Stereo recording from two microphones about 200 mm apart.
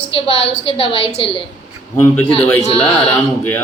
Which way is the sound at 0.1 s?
25° left (ahead or behind).